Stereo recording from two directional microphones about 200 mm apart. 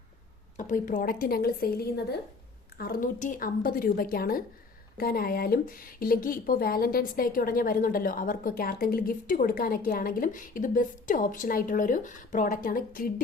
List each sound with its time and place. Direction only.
0.5 s speech: 40° left (ahead or behind)